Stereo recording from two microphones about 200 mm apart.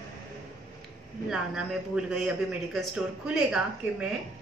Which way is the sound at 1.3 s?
5° right (ahead or behind).